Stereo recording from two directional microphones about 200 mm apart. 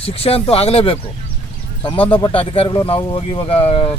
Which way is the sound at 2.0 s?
25° left (ahead or behind).